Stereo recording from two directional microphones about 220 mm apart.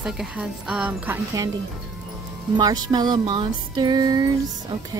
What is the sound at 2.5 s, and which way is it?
Music, 20° right (ahead or behind).